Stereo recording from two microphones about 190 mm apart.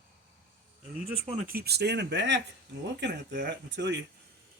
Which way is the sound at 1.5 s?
55° right (ahead or behind).